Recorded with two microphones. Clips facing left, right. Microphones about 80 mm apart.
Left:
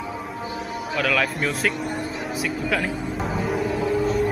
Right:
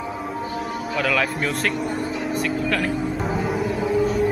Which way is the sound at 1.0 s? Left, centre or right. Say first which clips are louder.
Even; centre.